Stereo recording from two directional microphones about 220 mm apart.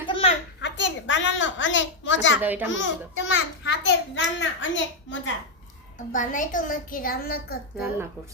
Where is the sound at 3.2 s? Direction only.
60° left (ahead or behind).